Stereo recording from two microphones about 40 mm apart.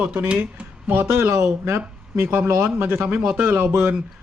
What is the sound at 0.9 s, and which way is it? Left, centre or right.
Speech, right.